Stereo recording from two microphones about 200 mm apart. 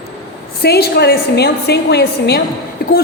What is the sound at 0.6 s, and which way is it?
A woman's voice, 50° left (ahead or behind).